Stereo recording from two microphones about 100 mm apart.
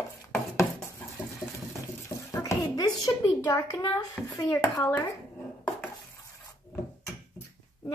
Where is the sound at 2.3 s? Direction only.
35° left (ahead or behind).